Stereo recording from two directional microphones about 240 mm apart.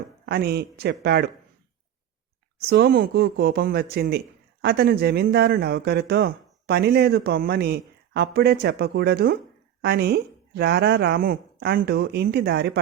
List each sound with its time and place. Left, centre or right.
0.3 s speech: right
2.6 s speech: right